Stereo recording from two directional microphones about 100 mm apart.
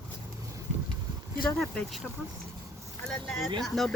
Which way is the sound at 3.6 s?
5° left (ahead or behind).